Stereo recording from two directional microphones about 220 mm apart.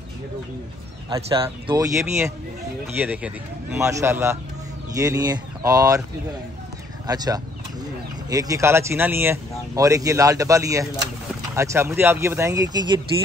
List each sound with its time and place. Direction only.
1.1 s speech: 20° right (ahead or behind)
7.1 s speech: 15° right (ahead or behind)